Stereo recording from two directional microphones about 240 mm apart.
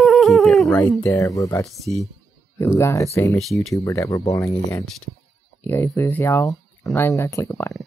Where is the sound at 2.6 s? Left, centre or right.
Centre.